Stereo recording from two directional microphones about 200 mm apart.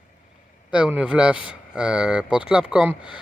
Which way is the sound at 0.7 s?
5° right (ahead or behind).